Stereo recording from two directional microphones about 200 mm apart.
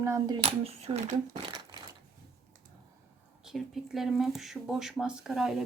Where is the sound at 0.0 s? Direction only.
15° right (ahead or behind); by 1.5 s 35° right (ahead or behind).